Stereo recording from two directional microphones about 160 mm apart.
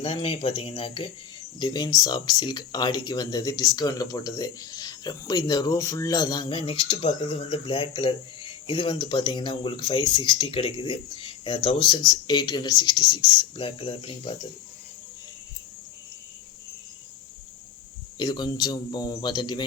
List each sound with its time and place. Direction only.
0.0 s speech: 35° left (ahead or behind)
18.2 s speech: 25° left (ahead or behind)